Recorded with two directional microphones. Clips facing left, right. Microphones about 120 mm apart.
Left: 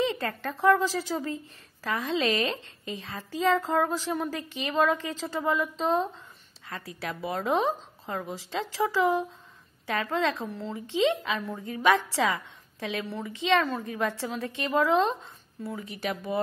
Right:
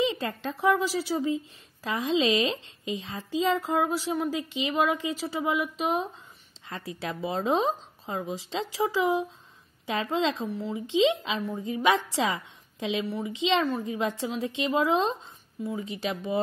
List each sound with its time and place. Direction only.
0.0 s speech: 15° right (ahead or behind)
6.7 s speech: 25° right (ahead or behind)
10.5 s speech: 10° right (ahead or behind)
10.9 s speech: 20° right (ahead or behind)